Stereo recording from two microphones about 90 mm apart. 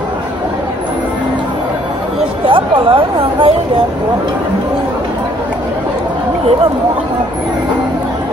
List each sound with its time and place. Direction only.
2.4 s speech: 80° right